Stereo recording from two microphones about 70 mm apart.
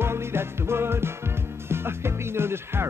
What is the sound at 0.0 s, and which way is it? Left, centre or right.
Music, right.